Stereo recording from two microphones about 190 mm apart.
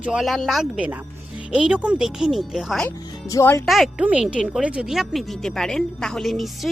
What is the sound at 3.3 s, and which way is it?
Speech, 15° left (ahead or behind).